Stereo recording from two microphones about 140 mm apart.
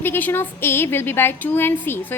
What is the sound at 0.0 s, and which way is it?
A woman's voice, 15° left (ahead or behind).